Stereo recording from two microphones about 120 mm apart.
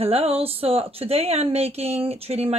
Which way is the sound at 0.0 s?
55° right (ahead or behind).